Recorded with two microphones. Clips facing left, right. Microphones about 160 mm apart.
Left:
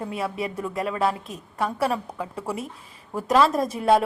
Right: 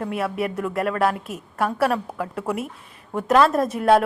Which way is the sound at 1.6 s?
Centre (ahead or behind).